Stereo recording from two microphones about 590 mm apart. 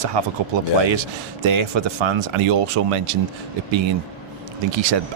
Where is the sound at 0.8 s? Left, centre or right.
Right.